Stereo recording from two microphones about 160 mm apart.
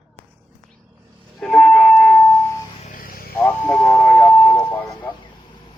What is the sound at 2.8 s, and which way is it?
Buzz, 60° left (ahead or behind).